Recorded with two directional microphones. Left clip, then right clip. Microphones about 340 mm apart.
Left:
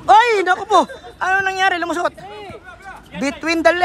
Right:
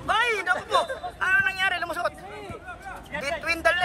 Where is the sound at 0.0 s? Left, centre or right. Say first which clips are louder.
Left 12 dB; centre.